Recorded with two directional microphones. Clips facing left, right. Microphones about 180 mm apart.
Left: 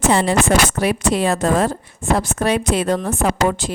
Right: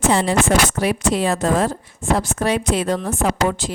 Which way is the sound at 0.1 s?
65° left (ahead or behind).